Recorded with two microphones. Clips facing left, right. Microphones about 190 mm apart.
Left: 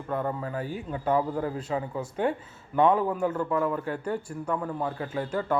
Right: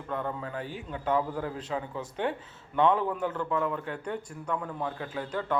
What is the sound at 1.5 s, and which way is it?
A man's voice, 10° left (ahead or behind).